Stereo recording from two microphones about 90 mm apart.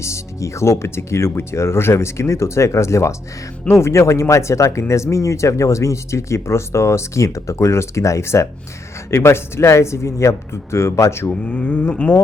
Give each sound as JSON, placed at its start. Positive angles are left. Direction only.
{"t": 0.0, "sound": "speech", "side_deg": 35}
{"t": 11.4, "sound": "speech", "side_deg": 15}